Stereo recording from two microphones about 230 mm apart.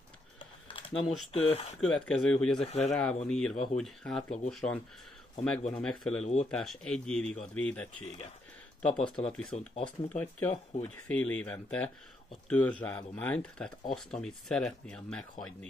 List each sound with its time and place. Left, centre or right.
0.4 s typing: left
1.0 s speech: centre
1.3 s speech: left
1.8 s speech: centre
2.6 s speech: left
2.9 s speech: centre
9.5 s speech: left
9.8 s speech: centre